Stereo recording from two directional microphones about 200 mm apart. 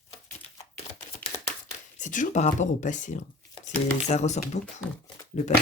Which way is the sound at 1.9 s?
40° left (ahead or behind).